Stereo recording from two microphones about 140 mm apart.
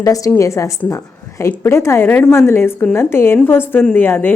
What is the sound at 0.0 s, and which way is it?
A woman's voice, 25° left (ahead or behind).